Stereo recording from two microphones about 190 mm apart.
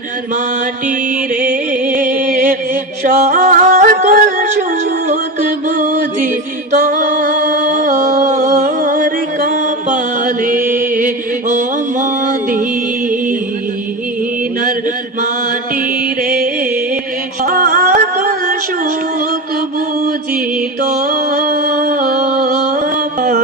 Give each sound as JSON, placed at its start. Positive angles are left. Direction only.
{"t": 1.4, "sound": "music", "side_deg": -45}
{"t": 17.4, "sound": "music", "side_deg": -50}
{"t": 21.0, "sound": "a sound", "side_deg": -50}
{"t": 22.6, "sound": "carnatic music", "side_deg": -50}